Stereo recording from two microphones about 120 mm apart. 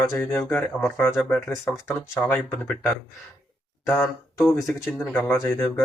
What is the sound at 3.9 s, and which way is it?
Speech, 15° left (ahead or behind).